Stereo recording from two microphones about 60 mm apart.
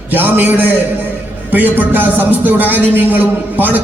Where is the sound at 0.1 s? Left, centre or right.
Right.